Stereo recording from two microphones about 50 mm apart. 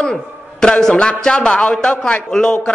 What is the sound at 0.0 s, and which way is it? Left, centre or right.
A man's voice, centre.